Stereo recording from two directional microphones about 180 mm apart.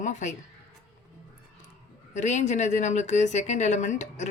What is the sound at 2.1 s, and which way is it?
Speech, 40° left (ahead or behind).